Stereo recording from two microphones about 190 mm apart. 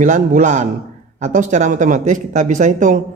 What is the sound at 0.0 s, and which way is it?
Speech, 40° right (ahead or behind).